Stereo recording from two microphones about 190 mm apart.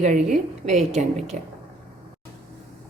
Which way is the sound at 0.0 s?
40° right (ahead or behind).